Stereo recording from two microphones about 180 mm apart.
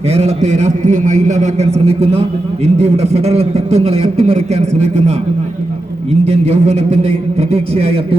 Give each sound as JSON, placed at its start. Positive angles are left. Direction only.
{"t": 0.1, "sound": "a man's voice", "side_deg": -35}
{"t": 6.2, "sound": "a man's voice", "side_deg": -35}